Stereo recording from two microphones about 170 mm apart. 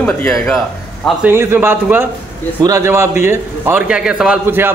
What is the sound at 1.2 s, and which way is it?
A man's voice, 15° right (ahead or behind).